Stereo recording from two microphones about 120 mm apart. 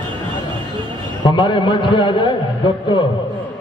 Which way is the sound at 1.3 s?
40° left (ahead or behind).